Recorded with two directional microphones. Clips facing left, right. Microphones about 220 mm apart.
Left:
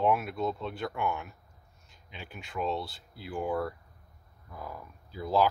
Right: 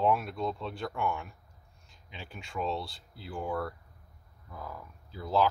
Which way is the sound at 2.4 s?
Centre (ahead or behind).